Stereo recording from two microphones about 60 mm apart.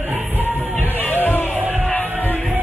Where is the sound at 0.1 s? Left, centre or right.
Right.